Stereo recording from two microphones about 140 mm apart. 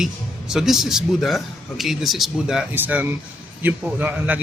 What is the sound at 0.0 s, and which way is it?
A man's voice, 5° right (ahead or behind).